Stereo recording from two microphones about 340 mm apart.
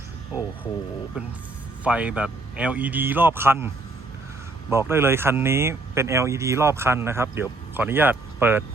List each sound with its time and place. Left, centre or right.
1.8 s speech: centre
4.7 s speech: centre